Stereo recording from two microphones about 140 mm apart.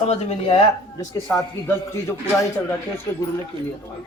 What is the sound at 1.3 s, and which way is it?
Speech, 20° left (ahead or behind).